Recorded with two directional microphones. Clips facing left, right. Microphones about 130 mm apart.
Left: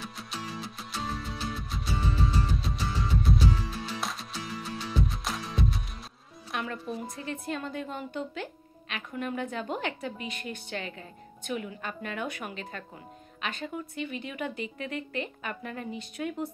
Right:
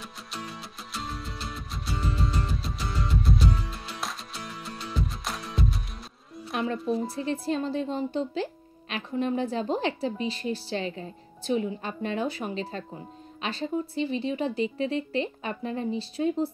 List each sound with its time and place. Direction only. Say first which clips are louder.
0.0 s music: even; centre (ahead or behind)
6.5 s speech: right 7 dB; 30° right (ahead or behind)